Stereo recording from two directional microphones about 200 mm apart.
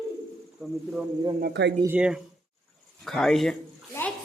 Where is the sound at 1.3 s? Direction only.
55° right (ahead or behind).